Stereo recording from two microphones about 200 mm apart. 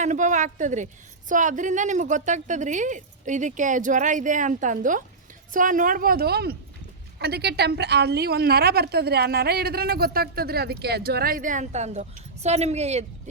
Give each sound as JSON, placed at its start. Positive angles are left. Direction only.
{"t": 0.0, "sound": "a woman's voice", "side_deg": -40}